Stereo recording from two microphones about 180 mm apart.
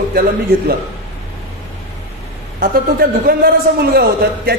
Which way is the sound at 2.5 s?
55° right (ahead or behind).